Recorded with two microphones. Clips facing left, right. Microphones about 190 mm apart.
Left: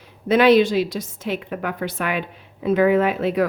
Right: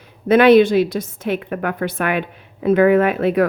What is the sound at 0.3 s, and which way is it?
A woman's voice, 55° right (ahead or behind).